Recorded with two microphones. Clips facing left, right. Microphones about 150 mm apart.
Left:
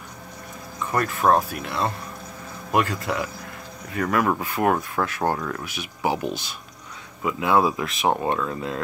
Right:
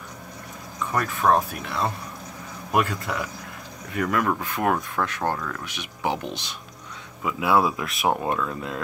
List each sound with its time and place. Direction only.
0.9 s speech: centre (ahead or behind)